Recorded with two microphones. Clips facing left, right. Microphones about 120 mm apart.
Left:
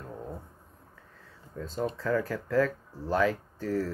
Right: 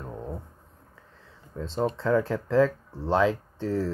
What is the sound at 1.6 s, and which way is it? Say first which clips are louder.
Speech: right 4 dB; 25° right (ahead or behind).